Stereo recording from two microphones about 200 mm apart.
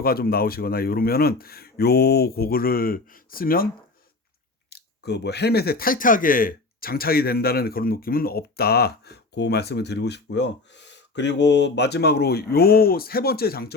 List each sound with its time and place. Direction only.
0.0 s speech: 50° left (ahead or behind)
4.7 s speech: 55° left (ahead or behind)